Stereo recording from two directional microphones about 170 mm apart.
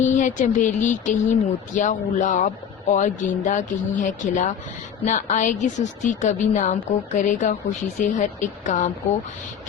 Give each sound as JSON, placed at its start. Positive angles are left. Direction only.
{"t": 0.0, "sound": "speech", "side_deg": 45}